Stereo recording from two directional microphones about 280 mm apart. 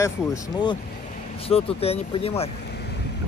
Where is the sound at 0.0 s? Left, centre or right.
Centre.